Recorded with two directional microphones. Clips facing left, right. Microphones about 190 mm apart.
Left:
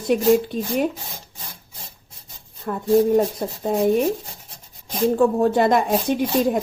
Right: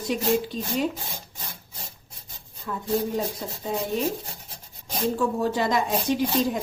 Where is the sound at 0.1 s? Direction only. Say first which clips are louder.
Left 8 dB; 55° left (ahead or behind).